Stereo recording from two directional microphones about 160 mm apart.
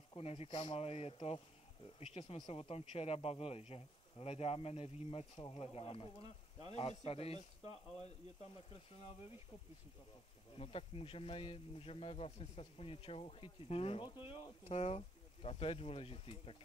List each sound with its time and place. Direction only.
0.1 s speech: 35° left (ahead or behind)
10.5 s speech: 35° left (ahead or behind)